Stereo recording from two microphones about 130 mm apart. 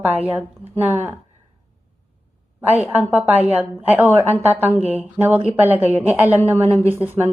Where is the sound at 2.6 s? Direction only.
15° right (ahead or behind).